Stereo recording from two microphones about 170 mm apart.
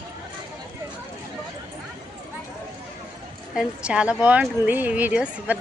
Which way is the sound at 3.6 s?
5° right (ahead or behind).